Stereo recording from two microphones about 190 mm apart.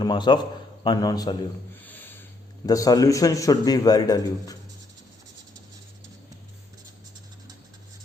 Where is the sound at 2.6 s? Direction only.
20° left (ahead or behind).